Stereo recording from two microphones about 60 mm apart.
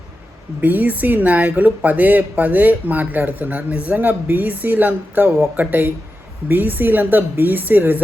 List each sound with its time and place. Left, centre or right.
0.6 s a woman's voice: right